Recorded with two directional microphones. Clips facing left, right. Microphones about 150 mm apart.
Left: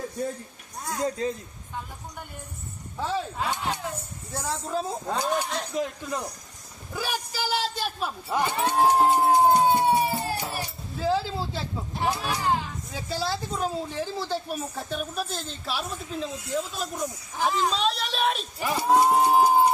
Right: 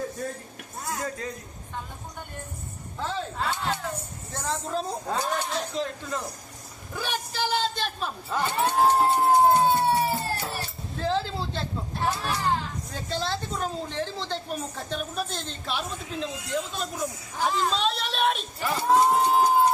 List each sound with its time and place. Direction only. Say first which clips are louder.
1.2 s speech: left 7 dB; 25° left (ahead or behind)
3.3 s speech: even; 15° left (ahead or behind)
18.6 s speech: even; 15° left (ahead or behind)